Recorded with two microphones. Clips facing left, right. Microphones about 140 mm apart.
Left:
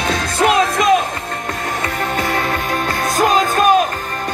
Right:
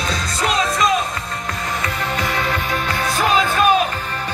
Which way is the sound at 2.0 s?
50° left (ahead or behind).